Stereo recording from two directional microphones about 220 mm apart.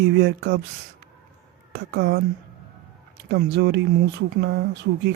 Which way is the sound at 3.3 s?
50° right (ahead or behind).